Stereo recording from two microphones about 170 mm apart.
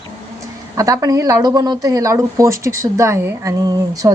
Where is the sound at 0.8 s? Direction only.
20° right (ahead or behind).